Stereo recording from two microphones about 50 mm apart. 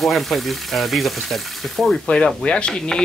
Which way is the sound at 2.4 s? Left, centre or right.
Centre.